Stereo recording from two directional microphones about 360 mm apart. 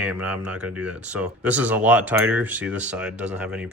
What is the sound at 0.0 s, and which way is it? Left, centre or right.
Speech, centre.